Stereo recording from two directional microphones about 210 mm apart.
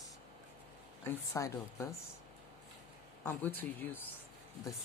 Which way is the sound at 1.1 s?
15° left (ahead or behind).